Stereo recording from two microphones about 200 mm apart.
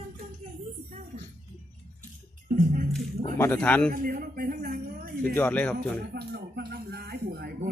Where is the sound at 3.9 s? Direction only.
45° right (ahead or behind).